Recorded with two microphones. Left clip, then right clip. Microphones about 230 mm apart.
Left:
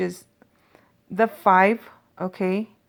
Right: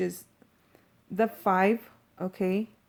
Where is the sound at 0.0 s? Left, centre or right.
Left.